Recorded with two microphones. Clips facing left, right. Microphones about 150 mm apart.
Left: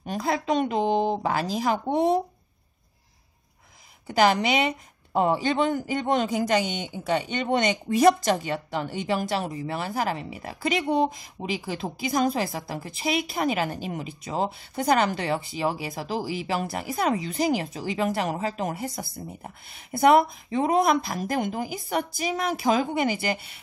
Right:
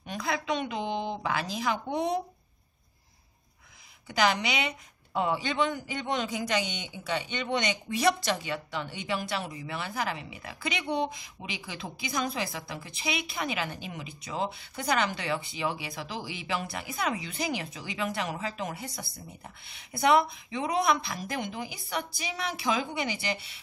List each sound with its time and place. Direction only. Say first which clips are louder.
0.0 s speech: left 5 dB; 40° left (ahead or behind)
4.1 s a woman's voice: left 6 dB; 45° left (ahead or behind)